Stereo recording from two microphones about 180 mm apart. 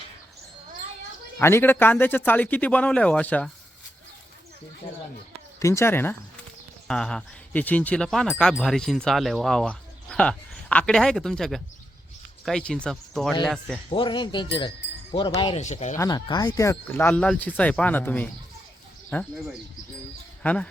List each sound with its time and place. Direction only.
1.4 s speech: 15° left (ahead or behind)
5.5 s speech: 15° left (ahead or behind)
13.9 s speech: 25° left (ahead or behind)
16.0 s speech: 20° left (ahead or behind)
20.4 s speech: 10° left (ahead or behind)